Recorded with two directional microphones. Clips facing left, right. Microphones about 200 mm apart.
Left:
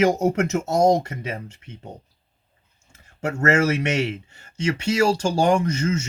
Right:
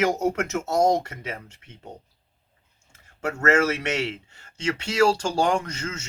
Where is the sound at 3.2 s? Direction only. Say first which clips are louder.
Left 2 dB; 15° left (ahead or behind).